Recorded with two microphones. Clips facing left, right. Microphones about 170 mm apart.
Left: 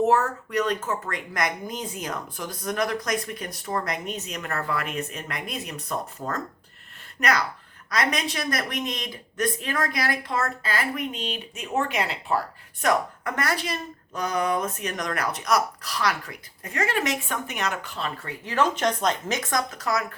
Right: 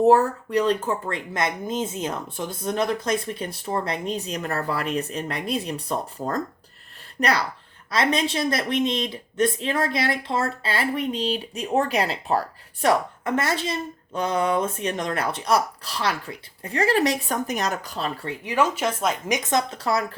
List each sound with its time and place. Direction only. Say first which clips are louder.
0.0 s speech: right 5 dB; 35° right (ahead or behind)
18.4 s speech: even; 10° right (ahead or behind)
19.4 s speech: right 3 dB; 25° right (ahead or behind)